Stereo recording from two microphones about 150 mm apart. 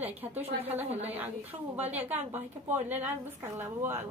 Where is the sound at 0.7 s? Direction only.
45° right (ahead or behind).